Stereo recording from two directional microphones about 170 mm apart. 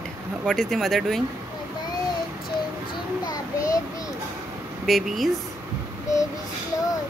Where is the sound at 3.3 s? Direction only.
20° left (ahead or behind).